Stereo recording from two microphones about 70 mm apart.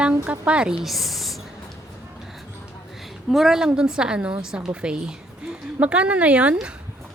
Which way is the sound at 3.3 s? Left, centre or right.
Centre.